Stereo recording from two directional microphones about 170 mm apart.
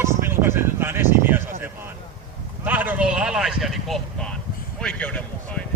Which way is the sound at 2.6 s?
10° right (ahead or behind).